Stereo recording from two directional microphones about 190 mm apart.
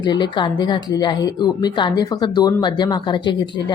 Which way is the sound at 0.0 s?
25° left (ahead or behind).